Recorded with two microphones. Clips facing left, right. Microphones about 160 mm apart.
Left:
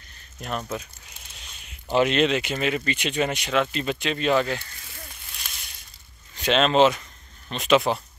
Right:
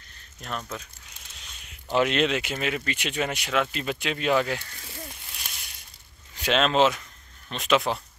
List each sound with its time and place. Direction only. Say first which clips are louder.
0.4 s speech: left 4 dB; 10° left (ahead or behind); by 4.6 s 10° right (ahead or behind)
6.3 s speech: left 3 dB; 5° right (ahead or behind)